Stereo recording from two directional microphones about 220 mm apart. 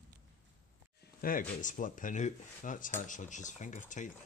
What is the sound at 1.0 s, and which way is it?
Speech, 40° left (ahead or behind).